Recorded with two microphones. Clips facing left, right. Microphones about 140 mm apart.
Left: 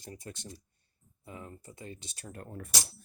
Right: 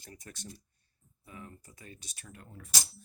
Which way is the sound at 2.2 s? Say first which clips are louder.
Left 8 dB; 45° left (ahead or behind).